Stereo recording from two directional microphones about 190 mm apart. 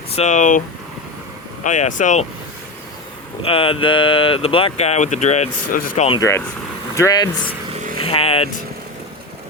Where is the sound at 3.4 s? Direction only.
30° left (ahead or behind); by 6.0 s 45° left (ahead or behind).